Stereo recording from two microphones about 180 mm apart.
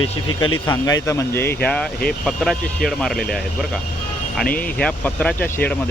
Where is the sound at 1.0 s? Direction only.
15° left (ahead or behind).